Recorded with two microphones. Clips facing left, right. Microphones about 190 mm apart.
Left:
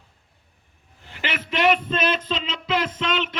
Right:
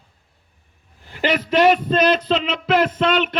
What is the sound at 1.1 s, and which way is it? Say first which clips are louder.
A man's voice: right 10 dB; 40° right (ahead or behind).